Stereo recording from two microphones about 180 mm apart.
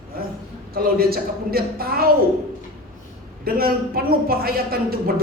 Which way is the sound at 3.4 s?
55° right (ahead or behind).